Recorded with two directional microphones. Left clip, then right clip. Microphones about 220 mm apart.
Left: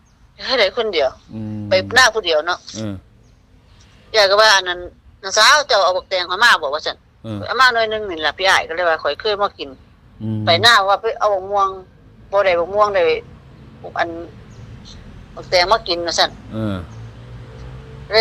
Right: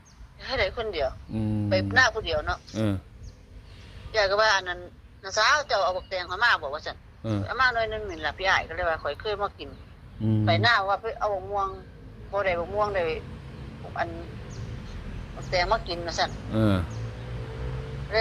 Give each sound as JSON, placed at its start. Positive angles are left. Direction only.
{"t": 0.3, "sound": "speech", "side_deg": 45}
{"t": 1.3, "sound": "speech", "side_deg": 0}
{"t": 1.7, "sound": "a man's voice", "side_deg": 45}
{"t": 4.1, "sound": "a man's voice", "side_deg": 45}
{"t": 7.2, "sound": "speech", "side_deg": 5}
{"t": 7.4, "sound": "a man's voice", "side_deg": 45}
{"t": 15.4, "sound": "a man's voice", "side_deg": 45}
{"t": 16.5, "sound": "speech", "side_deg": 0}